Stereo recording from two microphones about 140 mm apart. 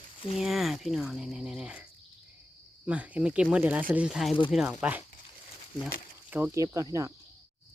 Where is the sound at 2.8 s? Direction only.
10° right (ahead or behind).